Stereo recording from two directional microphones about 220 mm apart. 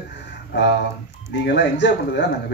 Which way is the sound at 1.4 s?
50° left (ahead or behind).